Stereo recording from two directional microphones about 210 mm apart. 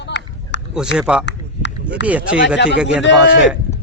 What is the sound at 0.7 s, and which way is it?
Speech, 5° right (ahead or behind).